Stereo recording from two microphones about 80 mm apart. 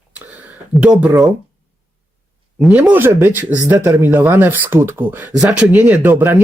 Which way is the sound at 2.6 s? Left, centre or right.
Centre.